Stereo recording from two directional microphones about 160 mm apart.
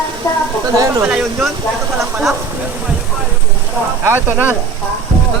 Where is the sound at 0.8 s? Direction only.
15° right (ahead or behind).